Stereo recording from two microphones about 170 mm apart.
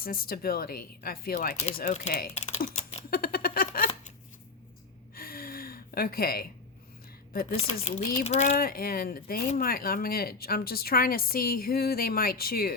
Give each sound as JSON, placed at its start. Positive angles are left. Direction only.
{"t": 0.0, "sound": "speech", "side_deg": 60}
{"t": 1.8, "sound": "speech", "side_deg": 45}
{"t": 3.1, "sound": "a sound", "side_deg": 60}
{"t": 5.1, "sound": "gasp", "side_deg": 60}
{"t": 7.5, "sound": "speech", "side_deg": 35}
{"t": 8.5, "sound": "speech", "side_deg": 60}